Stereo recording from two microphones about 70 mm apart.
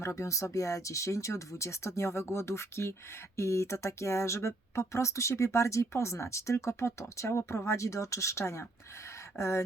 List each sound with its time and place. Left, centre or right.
0.0 s speech: left